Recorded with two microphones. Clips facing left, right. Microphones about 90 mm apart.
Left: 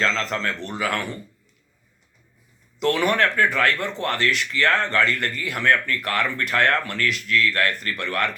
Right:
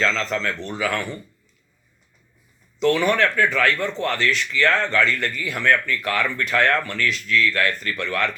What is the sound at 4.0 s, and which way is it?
A man's voice, 50° left (ahead or behind).